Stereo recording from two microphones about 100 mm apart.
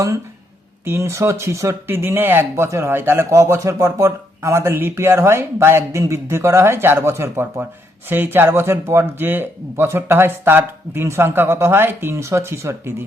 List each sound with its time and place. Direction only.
0.9 s speech: 25° right (ahead or behind)